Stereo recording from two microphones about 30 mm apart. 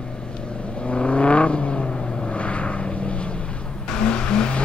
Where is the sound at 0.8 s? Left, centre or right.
Left.